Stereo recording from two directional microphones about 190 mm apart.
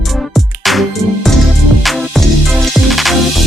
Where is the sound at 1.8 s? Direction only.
Centre (ahead or behind).